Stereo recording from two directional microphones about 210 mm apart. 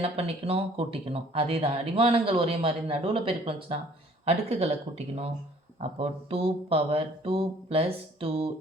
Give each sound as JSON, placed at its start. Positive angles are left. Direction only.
{"t": 0.0, "sound": "speech", "side_deg": -25}